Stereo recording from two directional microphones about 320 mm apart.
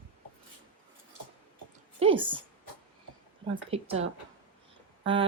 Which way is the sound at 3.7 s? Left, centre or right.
Centre.